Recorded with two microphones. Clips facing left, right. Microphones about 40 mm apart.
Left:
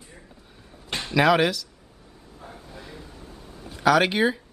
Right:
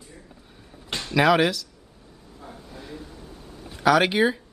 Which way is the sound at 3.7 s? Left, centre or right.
Centre.